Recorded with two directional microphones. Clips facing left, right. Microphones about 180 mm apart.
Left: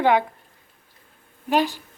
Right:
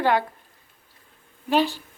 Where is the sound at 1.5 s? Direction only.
15° left (ahead or behind).